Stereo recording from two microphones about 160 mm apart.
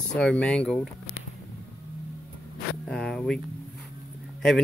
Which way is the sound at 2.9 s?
5° left (ahead or behind).